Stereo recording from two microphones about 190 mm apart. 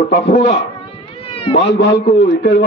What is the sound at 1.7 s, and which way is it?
Speech, 60° left (ahead or behind).